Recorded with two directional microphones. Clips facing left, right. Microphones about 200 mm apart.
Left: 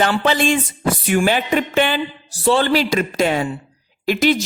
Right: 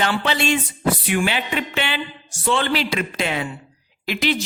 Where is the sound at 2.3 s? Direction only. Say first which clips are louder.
Left 5 dB; 35° left (ahead or behind).